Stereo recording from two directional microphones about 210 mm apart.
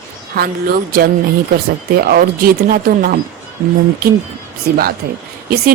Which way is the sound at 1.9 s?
45° right (ahead or behind).